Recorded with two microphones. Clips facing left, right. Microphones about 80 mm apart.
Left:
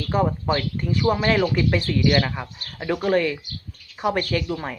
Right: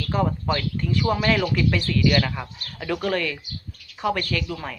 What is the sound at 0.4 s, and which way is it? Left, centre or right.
Speech, centre.